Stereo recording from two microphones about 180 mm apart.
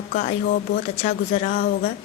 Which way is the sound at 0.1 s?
50° left (ahead or behind).